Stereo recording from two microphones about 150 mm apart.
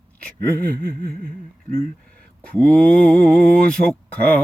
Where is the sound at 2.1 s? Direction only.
10° left (ahead or behind).